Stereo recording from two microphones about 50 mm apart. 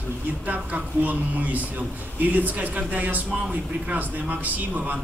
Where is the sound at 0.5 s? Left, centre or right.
Right.